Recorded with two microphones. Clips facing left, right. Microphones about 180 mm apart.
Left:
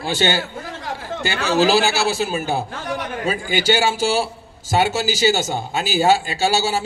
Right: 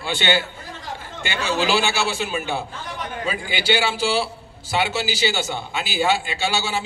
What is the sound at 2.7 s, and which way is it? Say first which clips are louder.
Speech: left 7 dB; 70° left (ahead or behind).